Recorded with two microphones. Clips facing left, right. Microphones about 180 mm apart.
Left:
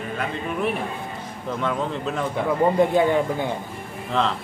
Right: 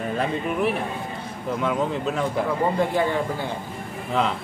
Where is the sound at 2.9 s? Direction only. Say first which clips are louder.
Left 4 dB; 20° left (ahead or behind).